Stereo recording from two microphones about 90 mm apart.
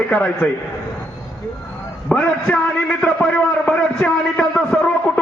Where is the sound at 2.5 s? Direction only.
10° left (ahead or behind).